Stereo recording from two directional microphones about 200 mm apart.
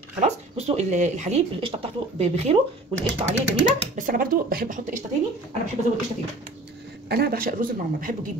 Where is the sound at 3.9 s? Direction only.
45° right (ahead or behind).